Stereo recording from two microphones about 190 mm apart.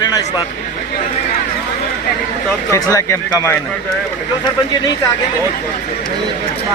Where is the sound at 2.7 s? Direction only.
15° left (ahead or behind).